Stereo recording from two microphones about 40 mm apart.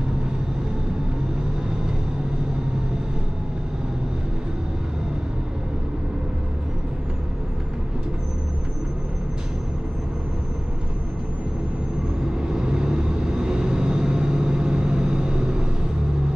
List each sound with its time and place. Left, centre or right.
12.4 s vehicle: right